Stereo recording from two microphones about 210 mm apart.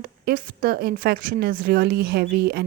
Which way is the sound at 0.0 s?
45° right (ahead or behind).